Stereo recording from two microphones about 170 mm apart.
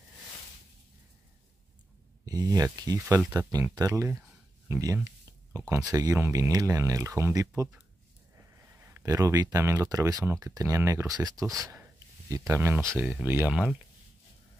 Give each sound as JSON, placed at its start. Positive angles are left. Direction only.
{"t": 2.2, "sound": "speech", "side_deg": -20}
{"t": 4.6, "sound": "a sound", "side_deg": -15}
{"t": 5.7, "sound": "speech", "side_deg": -20}